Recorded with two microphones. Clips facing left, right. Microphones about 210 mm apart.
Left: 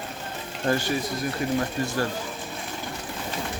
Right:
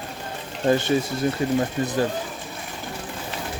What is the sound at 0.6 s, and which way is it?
Speech, 20° right (ahead or behind).